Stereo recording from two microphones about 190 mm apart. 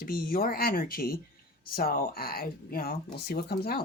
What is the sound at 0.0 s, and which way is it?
Speech, 50° left (ahead or behind).